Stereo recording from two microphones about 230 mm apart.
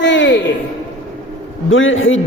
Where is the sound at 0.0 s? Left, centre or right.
Left.